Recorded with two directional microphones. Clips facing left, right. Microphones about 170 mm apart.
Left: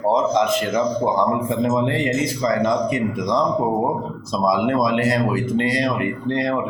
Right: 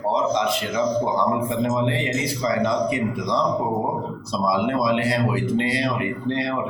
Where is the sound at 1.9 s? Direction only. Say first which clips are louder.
Left 3 dB; 45° left (ahead or behind).